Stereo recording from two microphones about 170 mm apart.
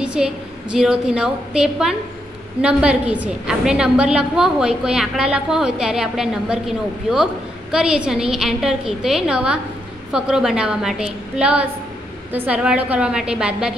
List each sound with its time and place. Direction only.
0.0 s a woman's voice: 5° right (ahead or behind)
7.7 s a woman's voice: 5° right (ahead or behind)